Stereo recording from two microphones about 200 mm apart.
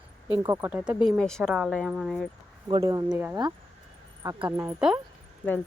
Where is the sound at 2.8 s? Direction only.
15° right (ahead or behind).